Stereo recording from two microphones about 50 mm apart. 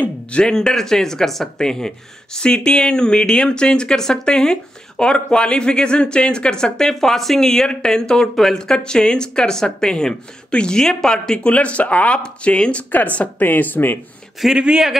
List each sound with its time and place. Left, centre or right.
0.0 s speech: left
11.4 s speech: left
12.9 s speech: left
14.4 s speech: centre